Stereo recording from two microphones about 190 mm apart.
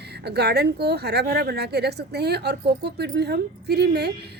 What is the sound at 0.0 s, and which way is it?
A woman's voice, 60° right (ahead or behind).